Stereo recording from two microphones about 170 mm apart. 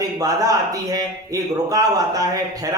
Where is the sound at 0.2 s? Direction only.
20° right (ahead or behind).